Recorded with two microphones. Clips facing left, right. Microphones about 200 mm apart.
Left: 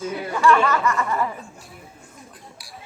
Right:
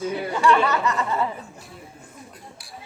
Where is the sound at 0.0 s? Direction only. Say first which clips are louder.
Left 1 dB; 20° right (ahead or behind).